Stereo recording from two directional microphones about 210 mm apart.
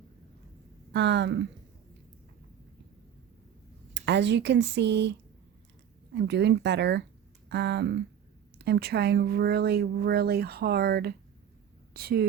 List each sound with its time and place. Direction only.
0.9 s speech: 55° right (ahead or behind)
3.9 s speech: 55° right (ahead or behind)
6.1 s speech: 55° right (ahead or behind)